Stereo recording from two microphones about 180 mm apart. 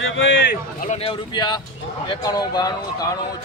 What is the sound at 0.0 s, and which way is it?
Speech, 90° left.